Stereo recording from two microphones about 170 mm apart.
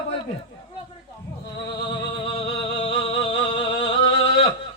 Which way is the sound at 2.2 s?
30° left (ahead or behind).